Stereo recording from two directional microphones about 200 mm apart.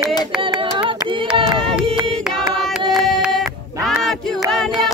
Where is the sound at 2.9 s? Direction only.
Centre (ahead or behind).